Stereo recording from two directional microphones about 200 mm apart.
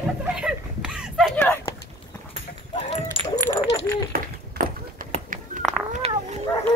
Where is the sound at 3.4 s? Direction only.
15° right (ahead or behind).